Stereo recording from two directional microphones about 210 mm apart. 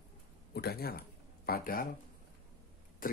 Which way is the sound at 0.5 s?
50° left (ahead or behind).